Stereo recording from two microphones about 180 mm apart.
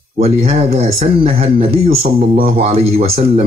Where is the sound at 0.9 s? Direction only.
30° right (ahead or behind).